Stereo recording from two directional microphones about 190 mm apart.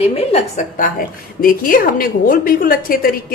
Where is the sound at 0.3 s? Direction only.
35° left (ahead or behind).